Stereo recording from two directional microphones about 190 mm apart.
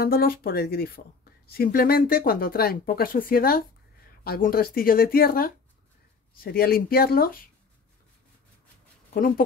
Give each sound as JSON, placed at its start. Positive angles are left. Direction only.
{"t": 0.0, "sound": "speech", "side_deg": 50}